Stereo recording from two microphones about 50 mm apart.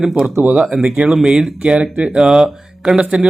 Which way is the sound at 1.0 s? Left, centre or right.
Right.